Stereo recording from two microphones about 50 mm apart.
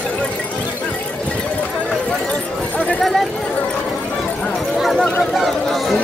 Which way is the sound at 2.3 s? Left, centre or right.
Left.